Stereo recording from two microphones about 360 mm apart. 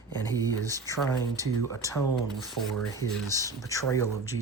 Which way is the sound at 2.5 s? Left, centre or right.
Centre.